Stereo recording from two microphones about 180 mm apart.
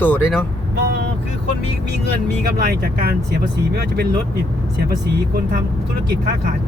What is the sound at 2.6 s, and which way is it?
Speech, 60° right (ahead or behind).